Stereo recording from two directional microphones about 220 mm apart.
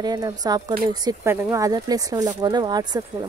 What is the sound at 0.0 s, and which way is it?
Speech, 15° right (ahead or behind).